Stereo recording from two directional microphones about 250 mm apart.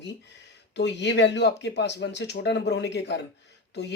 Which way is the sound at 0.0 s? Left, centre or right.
Left.